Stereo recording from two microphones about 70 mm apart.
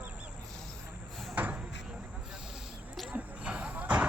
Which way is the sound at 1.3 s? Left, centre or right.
Right.